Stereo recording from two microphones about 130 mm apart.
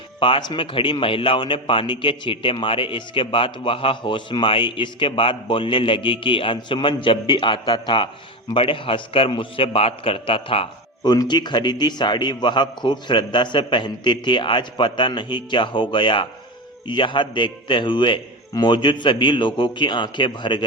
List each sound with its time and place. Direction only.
0.2 s a man's voice: 35° left (ahead or behind)
11.0 s speech: 30° left (ahead or behind)